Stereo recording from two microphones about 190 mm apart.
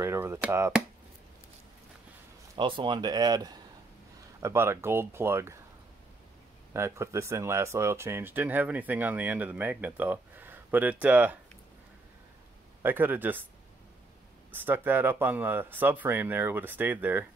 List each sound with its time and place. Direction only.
0.0 s speech: 15° right (ahead or behind)
2.5 s speech: 25° right (ahead or behind)
6.7 s speech: 15° right (ahead or behind)
12.8 s speech: 10° right (ahead or behind)
14.5 s speech: 10° right (ahead or behind)